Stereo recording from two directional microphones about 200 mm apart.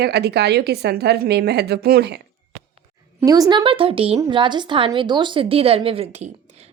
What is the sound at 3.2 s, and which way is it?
A woman's voice, 20° right (ahead or behind).